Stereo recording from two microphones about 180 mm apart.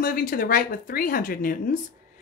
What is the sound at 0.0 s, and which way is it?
A woman's voice, 50° left (ahead or behind).